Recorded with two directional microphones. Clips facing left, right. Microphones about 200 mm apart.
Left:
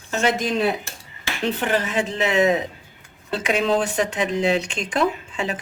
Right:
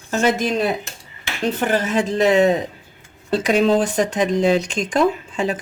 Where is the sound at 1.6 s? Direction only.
45° right (ahead or behind).